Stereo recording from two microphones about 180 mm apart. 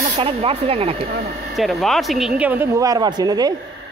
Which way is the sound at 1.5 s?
Centre (ahead or behind).